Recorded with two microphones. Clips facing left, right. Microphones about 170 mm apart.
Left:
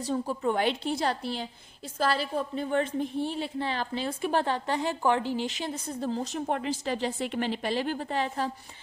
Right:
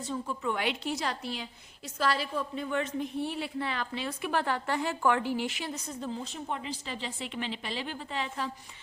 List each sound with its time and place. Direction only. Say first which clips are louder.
0.0 s a woman's voice: left 5 dB; 40° left (ahead or behind)
6.5 s a woman's voice: left 7 dB; 55° left (ahead or behind)